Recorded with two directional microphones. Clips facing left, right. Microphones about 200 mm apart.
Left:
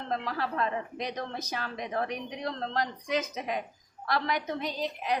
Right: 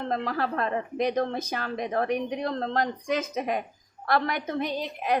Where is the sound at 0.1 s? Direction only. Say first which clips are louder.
Right 2 dB; 50° right (ahead or behind).